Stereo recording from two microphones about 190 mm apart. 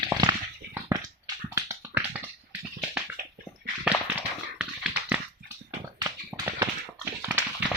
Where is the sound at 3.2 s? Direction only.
55° right (ahead or behind).